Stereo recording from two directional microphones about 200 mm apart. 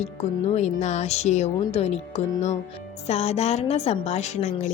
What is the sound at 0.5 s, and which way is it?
A woman's voice, 35° left (ahead or behind).